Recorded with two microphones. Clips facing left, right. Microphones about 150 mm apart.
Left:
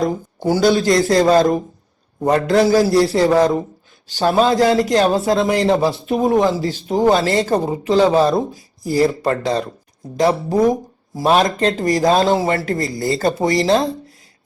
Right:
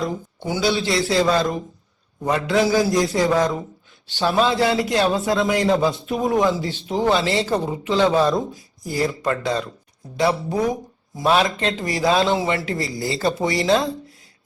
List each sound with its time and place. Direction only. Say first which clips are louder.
0.0 s speech: left 7 dB; 40° left (ahead or behind)